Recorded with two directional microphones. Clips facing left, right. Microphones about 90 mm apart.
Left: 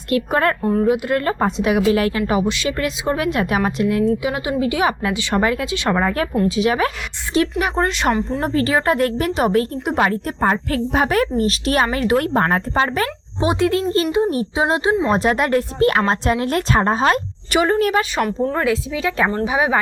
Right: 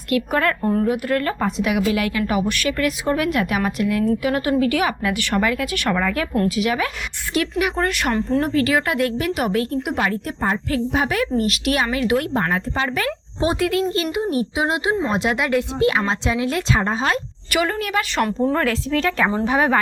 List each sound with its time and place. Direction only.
0.1 s a woman's voice: 30° left (ahead or behind)
0.6 s a woman's voice: 5° left (ahead or behind)
0.9 s a woman's voice: 20° left (ahead or behind)
4.2 s a woman's voice: 15° left (ahead or behind); by 6.9 s 35° left (ahead or behind)
7.6 s a woman's voice: 25° left (ahead or behind)
10.4 s a woman's voice: 50° left (ahead or behind)
13.4 s a woman's voice: 25° left (ahead or behind)
15.0 s a woman's voice: 40° left (ahead or behind)
17.5 s a woman's voice: 30° left (ahead or behind)
18.5 s speech: 10° left (ahead or behind)